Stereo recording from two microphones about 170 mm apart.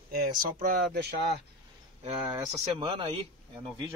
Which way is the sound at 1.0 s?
70° right (ahead or behind).